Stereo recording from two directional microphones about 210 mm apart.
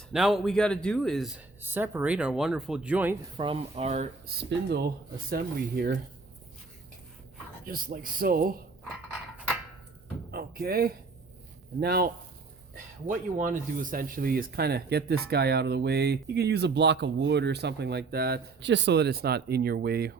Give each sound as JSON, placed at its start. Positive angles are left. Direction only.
{"t": 0.1, "sound": "speech", "side_deg": 0}
{"t": 3.3, "sound": "speech", "side_deg": -25}
{"t": 4.3, "sound": "speech", "side_deg": -50}
{"t": 7.7, "sound": "speech", "side_deg": -45}
{"t": 10.3, "sound": "a sound", "side_deg": -45}
{"t": 11.8, "sound": "speech", "side_deg": -50}